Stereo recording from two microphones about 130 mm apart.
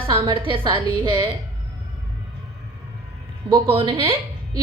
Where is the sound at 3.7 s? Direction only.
40° right (ahead or behind).